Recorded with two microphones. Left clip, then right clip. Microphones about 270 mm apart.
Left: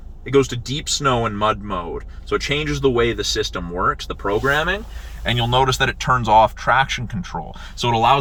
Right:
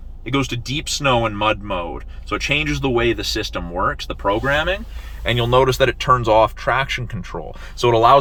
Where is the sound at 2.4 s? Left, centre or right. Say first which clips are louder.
Right 1 dB; centre.